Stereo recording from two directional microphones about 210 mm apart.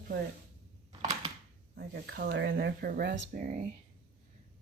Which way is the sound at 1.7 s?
50° right (ahead or behind).